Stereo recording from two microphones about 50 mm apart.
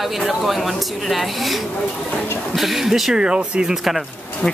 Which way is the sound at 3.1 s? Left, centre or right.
Centre.